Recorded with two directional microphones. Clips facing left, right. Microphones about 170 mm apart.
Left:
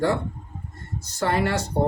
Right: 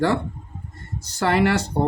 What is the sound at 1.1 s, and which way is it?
Speech, 80° right.